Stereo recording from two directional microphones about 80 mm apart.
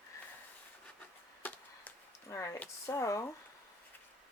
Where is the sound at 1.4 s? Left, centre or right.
Centre.